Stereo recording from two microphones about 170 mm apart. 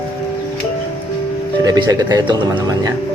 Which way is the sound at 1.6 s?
25° right (ahead or behind).